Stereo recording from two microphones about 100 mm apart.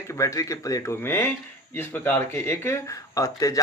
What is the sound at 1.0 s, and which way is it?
A man's voice, 25° left (ahead or behind).